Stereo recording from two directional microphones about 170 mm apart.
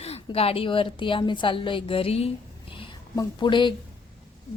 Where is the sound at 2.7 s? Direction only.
30° left (ahead or behind).